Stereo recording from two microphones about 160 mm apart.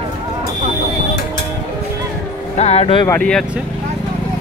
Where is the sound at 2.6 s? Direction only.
40° left (ahead or behind).